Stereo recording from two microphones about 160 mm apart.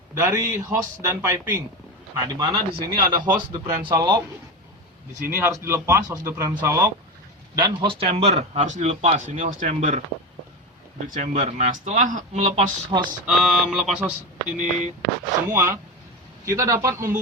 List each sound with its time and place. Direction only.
0.1 s a man's voice: 15° right (ahead or behind)
2.1 s speech: 25° right (ahead or behind)
5.3 s a man's voice: 20° right (ahead or behind); by 10.0 s 50° right (ahead or behind)
11.0 s speech: 50° right (ahead or behind)
12.9 s speech: 30° right (ahead or behind)
13.2 s speech: 5° right (ahead or behind)
14.4 s speech: 50° right (ahead or behind)
15.0 s a man's voice: 15° right (ahead or behind)